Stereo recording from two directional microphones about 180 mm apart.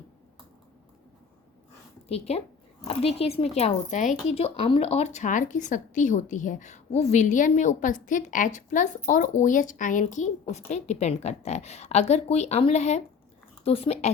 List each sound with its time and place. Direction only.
2.0 s speech: 35° left (ahead or behind)